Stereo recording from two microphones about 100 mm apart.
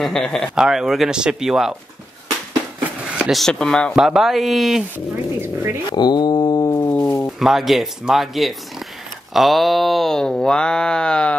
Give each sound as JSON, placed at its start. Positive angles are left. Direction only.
{"t": 0.0, "sound": "speech", "side_deg": 5}
{"t": 3.2, "sound": "speech", "side_deg": 0}
{"t": 4.9, "sound": "a sound", "side_deg": -25}
{"t": 5.9, "sound": "mantra", "side_deg": 45}
{"t": 6.9, "sound": "a sound", "side_deg": 25}
{"t": 7.3, "sound": "speech", "side_deg": -5}